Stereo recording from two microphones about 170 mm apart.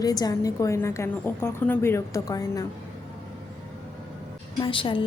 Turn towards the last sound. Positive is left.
turn(degrees=30)  # may be behind; listen again after turning